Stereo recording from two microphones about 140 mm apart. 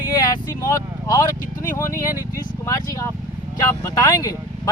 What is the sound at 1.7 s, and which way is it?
Speech, 20° left (ahead or behind).